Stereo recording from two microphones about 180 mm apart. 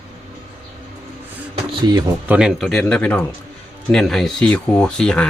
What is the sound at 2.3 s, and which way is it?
Speech, 5° right (ahead or behind).